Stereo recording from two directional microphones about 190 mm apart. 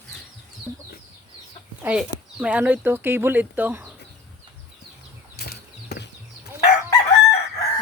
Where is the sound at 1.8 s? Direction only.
5° right (ahead or behind).